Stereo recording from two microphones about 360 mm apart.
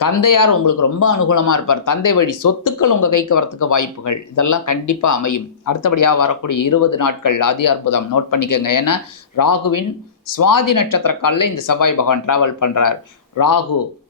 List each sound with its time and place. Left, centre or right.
0.0 s a man's voice: left